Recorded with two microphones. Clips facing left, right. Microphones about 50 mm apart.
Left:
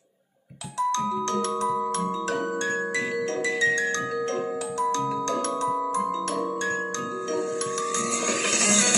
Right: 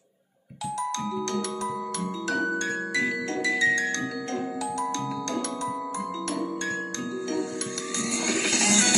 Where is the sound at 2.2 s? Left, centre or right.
Left.